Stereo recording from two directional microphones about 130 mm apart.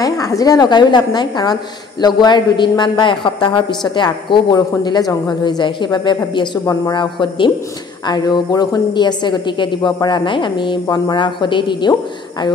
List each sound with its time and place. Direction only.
0.0 s a woman's voice: 25° left (ahead or behind)